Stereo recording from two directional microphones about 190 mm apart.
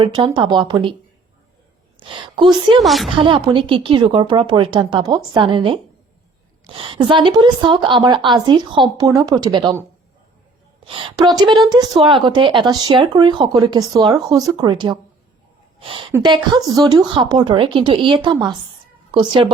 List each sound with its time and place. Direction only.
0.0 s speech: 25° right (ahead or behind)
2.0 s speech: 25° right (ahead or behind)
2.8 s a woman's voice: centre (ahead or behind)
3.2 s speech: 25° right (ahead or behind)
10.8 s speech: 25° right (ahead or behind)